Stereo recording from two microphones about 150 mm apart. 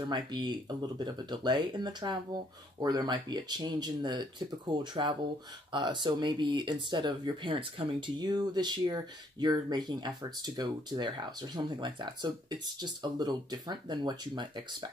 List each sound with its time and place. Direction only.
0.1 s speech: 30° right (ahead or behind)